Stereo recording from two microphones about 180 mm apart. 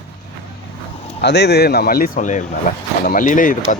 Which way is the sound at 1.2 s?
70° left (ahead or behind).